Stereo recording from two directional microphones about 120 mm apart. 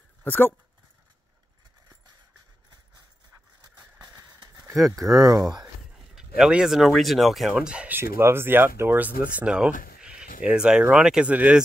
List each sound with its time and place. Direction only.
0.2 s speech: 15° left (ahead or behind)
5.2 s speech: 30° right (ahead or behind)
5.9 s speech: 5° right (ahead or behind)
8.0 s speech: 20° right (ahead or behind)